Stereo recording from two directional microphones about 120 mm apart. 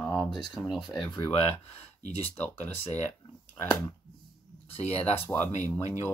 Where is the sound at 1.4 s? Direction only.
55° left (ahead or behind).